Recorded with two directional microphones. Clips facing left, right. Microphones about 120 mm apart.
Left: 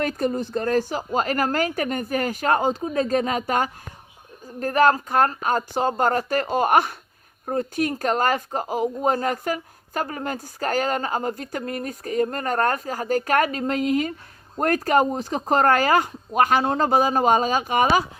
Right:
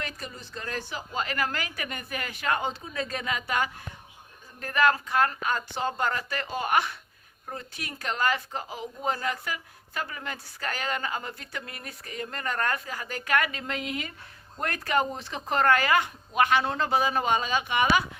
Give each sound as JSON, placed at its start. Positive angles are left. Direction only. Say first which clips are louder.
{"t": 0.0, "sound": "speech", "louder": "left 15 dB", "side_deg": 45}